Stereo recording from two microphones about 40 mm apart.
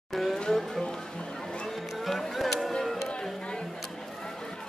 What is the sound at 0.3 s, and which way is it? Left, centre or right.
Music, centre.